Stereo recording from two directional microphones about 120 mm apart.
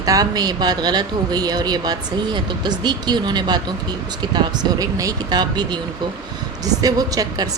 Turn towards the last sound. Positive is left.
turn(degrees=-30)  # may be behind; listen again after turning